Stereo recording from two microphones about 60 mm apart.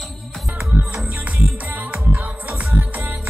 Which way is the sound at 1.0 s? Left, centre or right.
Right.